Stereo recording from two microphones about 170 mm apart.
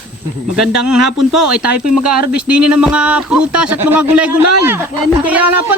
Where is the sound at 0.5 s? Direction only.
Centre (ahead or behind).